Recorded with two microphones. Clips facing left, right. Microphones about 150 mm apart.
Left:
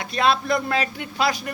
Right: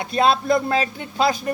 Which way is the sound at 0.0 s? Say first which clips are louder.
Right 3 dB; 30° right (ahead or behind).